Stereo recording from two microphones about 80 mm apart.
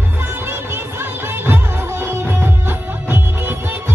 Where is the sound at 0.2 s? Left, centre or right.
Right.